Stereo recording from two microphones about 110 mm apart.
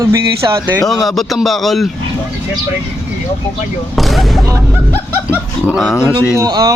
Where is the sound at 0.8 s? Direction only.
Centre (ahead or behind).